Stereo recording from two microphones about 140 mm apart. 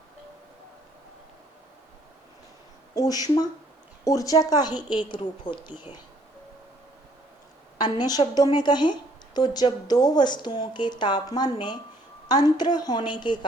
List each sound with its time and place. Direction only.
2.9 s a woman's voice: 25° left (ahead or behind)
7.8 s a woman's voice: 30° left (ahead or behind)